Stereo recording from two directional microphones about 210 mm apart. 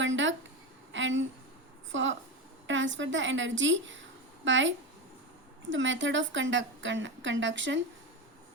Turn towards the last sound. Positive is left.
turn(degrees=-60)  # may be behind; listen again after turning